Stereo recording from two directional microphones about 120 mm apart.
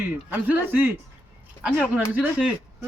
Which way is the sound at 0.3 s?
15° right (ahead or behind).